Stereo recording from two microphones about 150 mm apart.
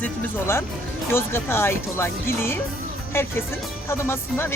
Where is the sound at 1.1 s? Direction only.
15° left (ahead or behind).